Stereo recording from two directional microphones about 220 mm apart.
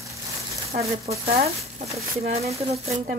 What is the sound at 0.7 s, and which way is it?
Speech, 30° right (ahead or behind).